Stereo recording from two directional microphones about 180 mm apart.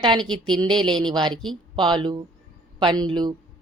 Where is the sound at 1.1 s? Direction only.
25° right (ahead or behind).